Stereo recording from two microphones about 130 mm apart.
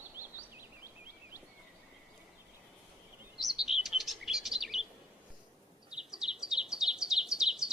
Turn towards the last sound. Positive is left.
turn(degrees=-5)  # may be behind; listen again after turning